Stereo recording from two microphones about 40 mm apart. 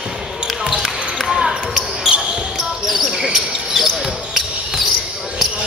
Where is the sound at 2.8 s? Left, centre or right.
Centre.